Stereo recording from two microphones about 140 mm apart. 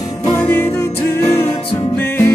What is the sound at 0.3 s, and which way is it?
Music, 15° left (ahead or behind).